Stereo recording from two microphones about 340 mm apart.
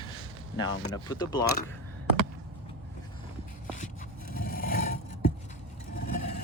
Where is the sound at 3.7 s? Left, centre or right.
Left.